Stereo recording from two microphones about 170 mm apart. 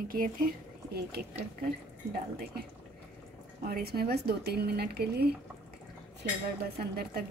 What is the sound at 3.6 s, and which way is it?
Speech, 65° right (ahead or behind).